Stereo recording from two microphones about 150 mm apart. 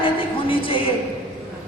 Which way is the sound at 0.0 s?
35° left (ahead or behind).